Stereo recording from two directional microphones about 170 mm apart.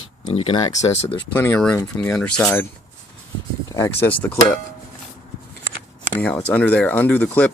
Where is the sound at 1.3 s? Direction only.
10° left (ahead or behind).